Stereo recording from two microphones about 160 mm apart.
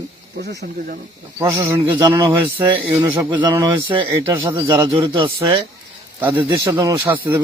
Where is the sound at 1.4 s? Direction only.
20° right (ahead or behind).